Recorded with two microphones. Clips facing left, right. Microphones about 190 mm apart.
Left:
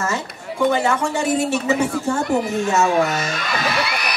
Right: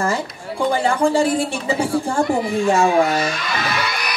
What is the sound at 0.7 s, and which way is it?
A woman's voice, 30° right (ahead or behind).